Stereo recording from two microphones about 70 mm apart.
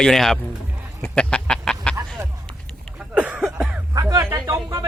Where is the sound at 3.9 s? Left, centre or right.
Right.